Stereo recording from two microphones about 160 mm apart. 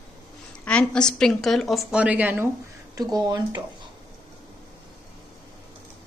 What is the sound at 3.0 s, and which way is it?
Speech, 25° right (ahead or behind).